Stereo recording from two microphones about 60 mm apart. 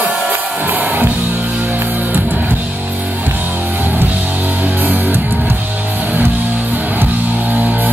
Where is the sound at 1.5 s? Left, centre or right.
Right.